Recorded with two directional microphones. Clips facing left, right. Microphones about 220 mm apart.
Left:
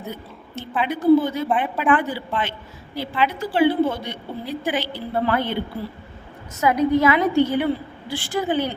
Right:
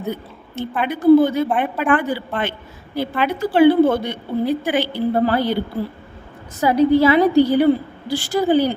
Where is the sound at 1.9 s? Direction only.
45° right (ahead or behind).